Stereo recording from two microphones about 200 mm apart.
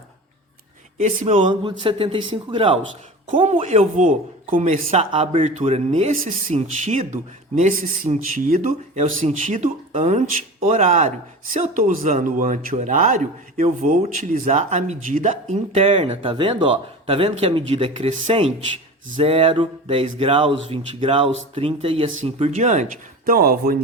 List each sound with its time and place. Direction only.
0.9 s speech: 35° right (ahead or behind)